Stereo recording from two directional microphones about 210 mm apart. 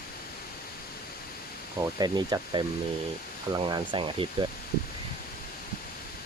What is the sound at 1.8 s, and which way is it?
Speech, 20° right (ahead or behind).